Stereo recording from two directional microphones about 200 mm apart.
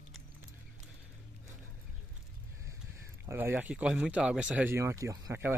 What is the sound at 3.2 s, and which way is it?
Speech, 10° right (ahead or behind).